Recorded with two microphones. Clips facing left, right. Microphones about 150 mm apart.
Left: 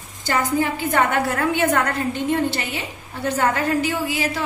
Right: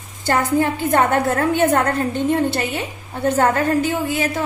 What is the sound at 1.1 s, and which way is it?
Speech, 40° right (ahead or behind).